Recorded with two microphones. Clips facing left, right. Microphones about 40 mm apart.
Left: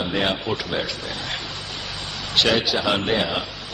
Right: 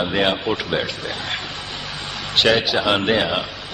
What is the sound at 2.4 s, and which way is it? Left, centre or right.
A man's voice, right.